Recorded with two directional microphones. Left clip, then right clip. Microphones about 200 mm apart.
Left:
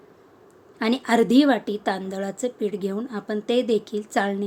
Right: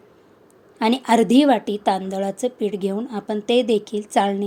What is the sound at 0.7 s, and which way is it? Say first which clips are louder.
A woman's voice: right 3 dB; 10° right (ahead or behind).